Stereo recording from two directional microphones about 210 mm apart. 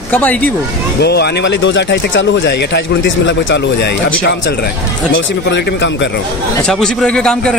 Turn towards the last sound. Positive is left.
turn(degrees=5)  # may be behind; listen again after turning